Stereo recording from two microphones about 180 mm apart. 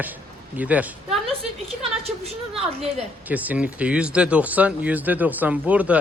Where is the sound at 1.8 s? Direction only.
35° right (ahead or behind).